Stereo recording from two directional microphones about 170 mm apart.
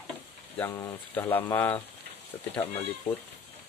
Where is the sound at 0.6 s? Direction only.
15° left (ahead or behind).